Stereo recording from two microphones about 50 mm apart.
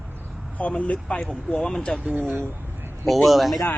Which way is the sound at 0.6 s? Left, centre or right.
Left.